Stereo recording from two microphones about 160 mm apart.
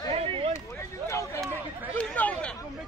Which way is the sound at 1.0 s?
20° left (ahead or behind).